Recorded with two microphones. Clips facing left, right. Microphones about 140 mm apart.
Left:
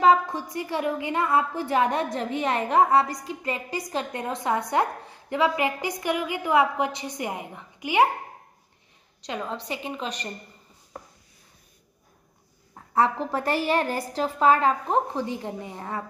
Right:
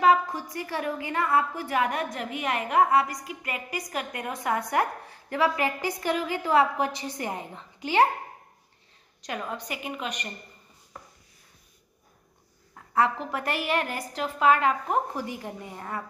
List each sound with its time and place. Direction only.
0.0 s a woman's voice: 25° left (ahead or behind)
9.2 s a woman's voice: 20° left (ahead or behind)
12.9 s a woman's voice: 30° left (ahead or behind)